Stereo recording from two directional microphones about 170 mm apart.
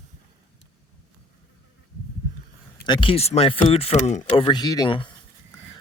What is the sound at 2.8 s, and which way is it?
Speech, 30° left (ahead or behind).